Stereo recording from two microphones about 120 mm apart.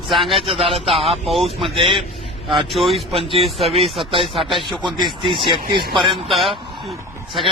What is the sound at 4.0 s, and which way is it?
Speech, 45° right (ahead or behind).